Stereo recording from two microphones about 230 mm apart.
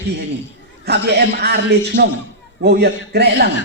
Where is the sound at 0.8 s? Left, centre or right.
Right.